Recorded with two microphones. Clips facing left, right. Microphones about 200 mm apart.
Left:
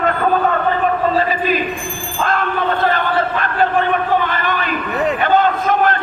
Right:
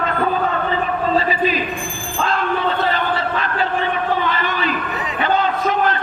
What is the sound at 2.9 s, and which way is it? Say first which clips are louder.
Crowd: left 3 dB; 50° left (ahead or behind).